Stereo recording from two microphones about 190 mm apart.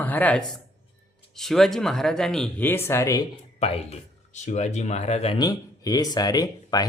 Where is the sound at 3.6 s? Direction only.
35° left (ahead or behind).